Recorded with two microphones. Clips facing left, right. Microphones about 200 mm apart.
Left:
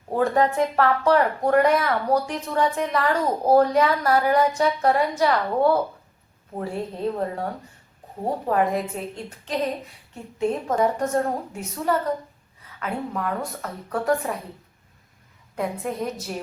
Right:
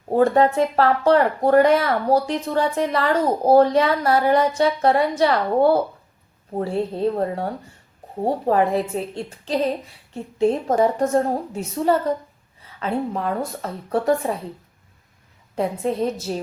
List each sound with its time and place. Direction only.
0.1 s a woman's voice: 30° right (ahead or behind)
15.5 s speech: 25° right (ahead or behind)